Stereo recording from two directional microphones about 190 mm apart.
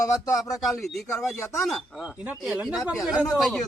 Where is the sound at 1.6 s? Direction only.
Centre (ahead or behind).